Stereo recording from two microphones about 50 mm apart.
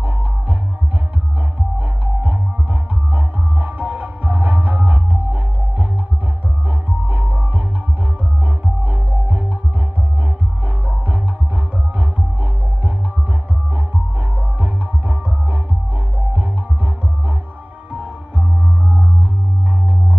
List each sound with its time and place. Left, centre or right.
0.0 s music: right
1.8 s music: right
8.8 s music: right
14.3 s music: right